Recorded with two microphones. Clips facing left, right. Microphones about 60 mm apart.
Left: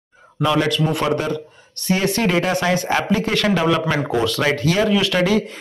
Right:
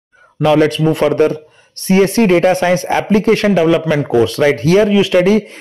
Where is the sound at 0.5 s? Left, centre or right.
Right.